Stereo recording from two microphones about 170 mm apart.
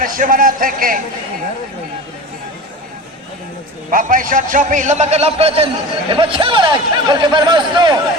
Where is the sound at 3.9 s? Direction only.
55° right (ahead or behind).